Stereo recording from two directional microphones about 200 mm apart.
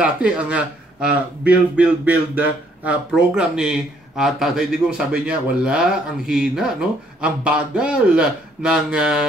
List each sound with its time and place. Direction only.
0.0 s speech: 5° right (ahead or behind)